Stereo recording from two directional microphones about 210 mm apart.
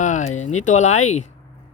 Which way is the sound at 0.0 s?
35° left (ahead or behind).